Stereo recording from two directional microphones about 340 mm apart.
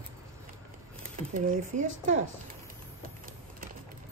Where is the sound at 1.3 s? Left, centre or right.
Right.